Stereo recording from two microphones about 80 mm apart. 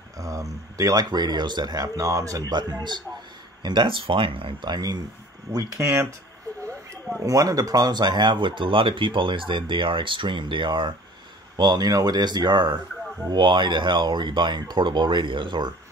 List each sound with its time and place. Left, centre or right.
0.2 s speech: right
2.5 s speech: right
5.5 s speech: right
7.2 s speech: right
11.5 s speech: right
13.3 s speech: right